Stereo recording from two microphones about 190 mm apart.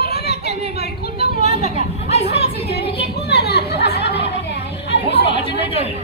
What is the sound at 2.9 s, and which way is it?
Chatter, 60° left (ahead or behind).